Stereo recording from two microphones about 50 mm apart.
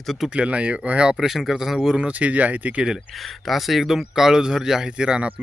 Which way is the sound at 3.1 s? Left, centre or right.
Centre.